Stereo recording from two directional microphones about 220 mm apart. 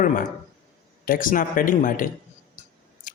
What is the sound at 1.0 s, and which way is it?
Speech, 40° left (ahead or behind).